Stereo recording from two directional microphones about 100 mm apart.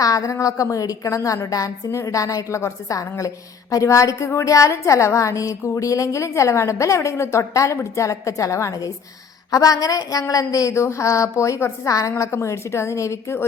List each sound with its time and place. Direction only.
0.0 s a woman's voice: 35° left (ahead or behind)